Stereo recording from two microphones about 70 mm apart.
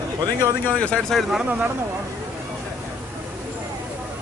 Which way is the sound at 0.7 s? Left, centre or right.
Centre.